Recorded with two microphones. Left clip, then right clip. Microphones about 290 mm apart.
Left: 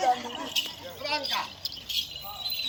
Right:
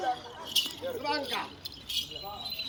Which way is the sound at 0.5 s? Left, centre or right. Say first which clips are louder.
Right 1 dB; right.